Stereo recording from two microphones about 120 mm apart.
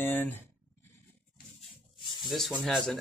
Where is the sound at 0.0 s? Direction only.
15° left (ahead or behind).